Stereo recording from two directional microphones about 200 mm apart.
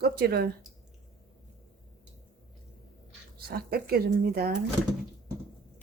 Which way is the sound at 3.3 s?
50° right (ahead or behind).